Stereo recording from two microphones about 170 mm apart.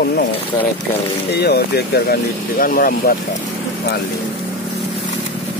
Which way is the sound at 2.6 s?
60° left (ahead or behind).